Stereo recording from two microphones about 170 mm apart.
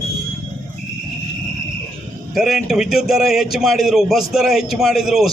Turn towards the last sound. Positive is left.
turn(degrees=0)  # may be behind; listen again after turning